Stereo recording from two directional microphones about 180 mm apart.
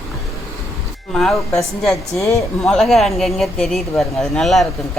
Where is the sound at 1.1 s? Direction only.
Centre (ahead or behind).